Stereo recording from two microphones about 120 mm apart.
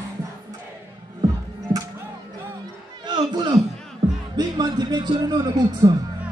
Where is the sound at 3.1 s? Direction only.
35° right (ahead or behind).